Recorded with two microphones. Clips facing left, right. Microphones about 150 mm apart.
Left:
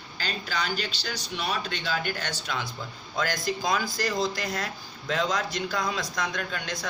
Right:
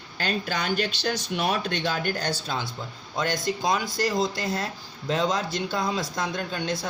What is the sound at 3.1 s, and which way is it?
Speech, 25° right (ahead or behind).